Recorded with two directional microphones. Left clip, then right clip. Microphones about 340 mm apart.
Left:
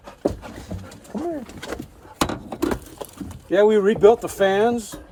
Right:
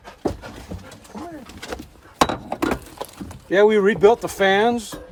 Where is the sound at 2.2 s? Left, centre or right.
Centre.